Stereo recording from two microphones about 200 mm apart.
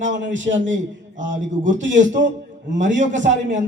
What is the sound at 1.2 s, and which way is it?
A man's voice, 40° right (ahead or behind).